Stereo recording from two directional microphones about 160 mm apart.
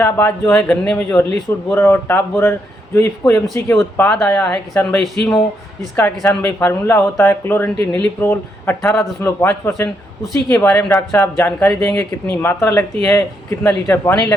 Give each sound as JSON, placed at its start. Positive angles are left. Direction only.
{"t": 0.0, "sound": "speech", "side_deg": 15}
{"t": 5.0, "sound": "speech", "side_deg": 0}
{"t": 6.0, "sound": "speech", "side_deg": 15}